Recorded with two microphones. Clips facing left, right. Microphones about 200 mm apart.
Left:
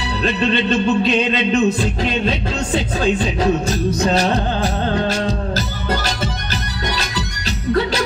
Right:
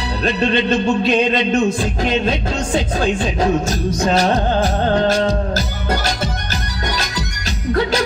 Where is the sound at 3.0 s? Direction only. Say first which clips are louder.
Left 2 dB; 45° right (ahead or behind).